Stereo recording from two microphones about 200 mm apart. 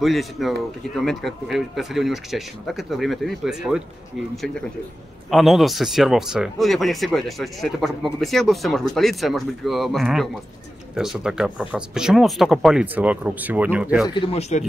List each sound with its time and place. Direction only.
0.0 s speech: centre (ahead or behind)
5.3 s speech: centre (ahead or behind)
14.0 s speech: 25° left (ahead or behind)